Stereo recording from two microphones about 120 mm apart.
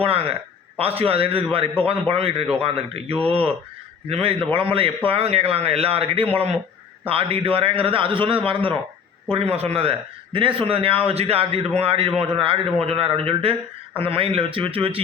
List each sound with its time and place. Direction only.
0.0 s a man's voice: 55° right (ahead or behind)